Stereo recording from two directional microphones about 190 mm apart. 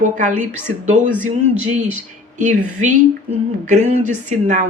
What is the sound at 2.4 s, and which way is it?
Speech, 40° right (ahead or behind).